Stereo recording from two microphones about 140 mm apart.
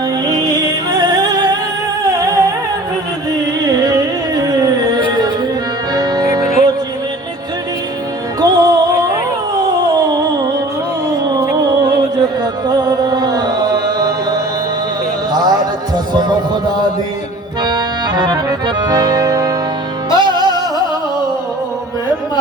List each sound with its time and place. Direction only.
0.3 s music: 25° right (ahead or behind)
2.0 s humming: 25° right (ahead or behind)
3.7 s music: 25° right (ahead or behind)
8.4 s music: 30° right (ahead or behind)
9.6 s a sound: 25° right (ahead or behind)
11.3 s music: 25° right (ahead or behind)
12.6 s chant: 30° right (ahead or behind)
15.3 s a sound: 30° right (ahead or behind)
17.6 s accordion: 30° right (ahead or behind)
20.1 s music: 30° right (ahead or behind)